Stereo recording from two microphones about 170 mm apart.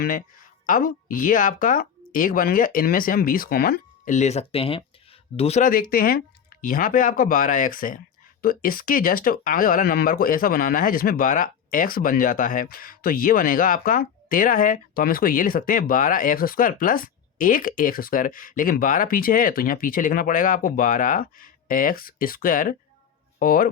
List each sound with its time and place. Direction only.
0.0 s speech: 55° left (ahead or behind)
4.1 s speech: 40° left (ahead or behind); by 23.6 s 55° left (ahead or behind)